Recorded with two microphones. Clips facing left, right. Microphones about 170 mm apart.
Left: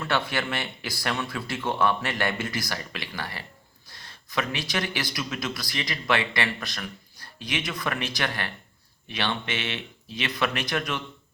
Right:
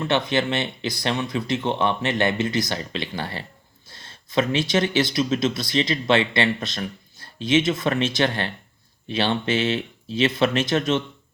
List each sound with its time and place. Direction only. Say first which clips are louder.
0.0 s speech: right 6 dB; 20° right (ahead or behind)